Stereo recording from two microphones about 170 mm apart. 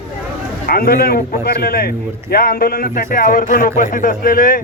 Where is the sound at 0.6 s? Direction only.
60° left (ahead or behind).